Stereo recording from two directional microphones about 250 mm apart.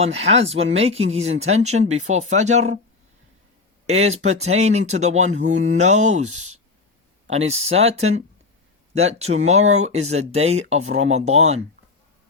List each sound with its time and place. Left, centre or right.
0.0 s speech: right
3.8 s speech: right